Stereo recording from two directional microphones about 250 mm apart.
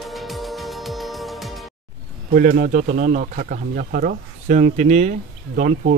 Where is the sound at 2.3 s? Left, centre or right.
Right.